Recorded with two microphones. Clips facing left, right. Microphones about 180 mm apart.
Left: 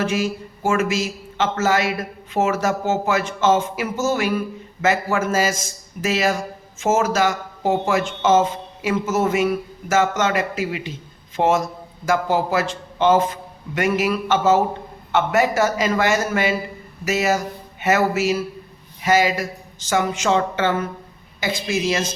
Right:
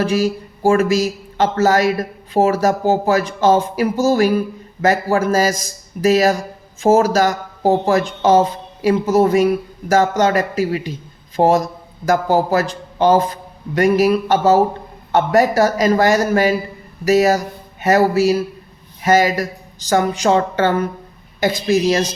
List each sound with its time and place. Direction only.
0.0 s a man's voice: 35° right (ahead or behind)